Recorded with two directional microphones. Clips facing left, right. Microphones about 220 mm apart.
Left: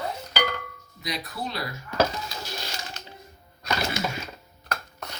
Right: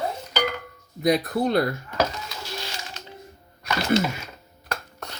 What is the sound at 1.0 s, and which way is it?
Speech, 55° right (ahead or behind).